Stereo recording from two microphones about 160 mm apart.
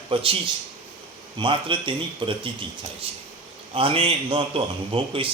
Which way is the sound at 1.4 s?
30° right (ahead or behind).